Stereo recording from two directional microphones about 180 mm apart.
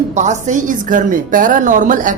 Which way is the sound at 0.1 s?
40° right (ahead or behind).